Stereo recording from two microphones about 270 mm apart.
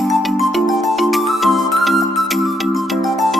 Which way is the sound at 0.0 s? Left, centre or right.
Centre.